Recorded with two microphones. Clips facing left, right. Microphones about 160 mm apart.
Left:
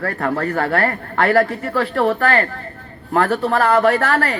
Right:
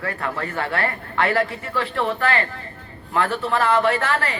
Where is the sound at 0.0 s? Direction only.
45° left (ahead or behind).